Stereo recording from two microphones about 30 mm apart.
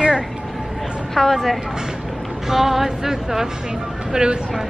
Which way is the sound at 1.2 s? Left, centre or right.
Centre.